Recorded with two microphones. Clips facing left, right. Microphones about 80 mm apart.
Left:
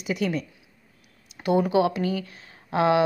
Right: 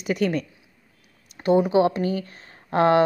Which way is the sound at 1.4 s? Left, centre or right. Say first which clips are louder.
Right 3 dB; right.